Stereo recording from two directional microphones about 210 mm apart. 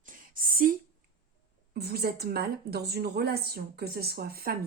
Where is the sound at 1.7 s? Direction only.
50° right (ahead or behind).